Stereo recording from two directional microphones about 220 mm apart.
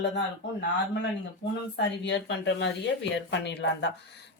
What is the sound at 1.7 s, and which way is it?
Speech, 50° left (ahead or behind).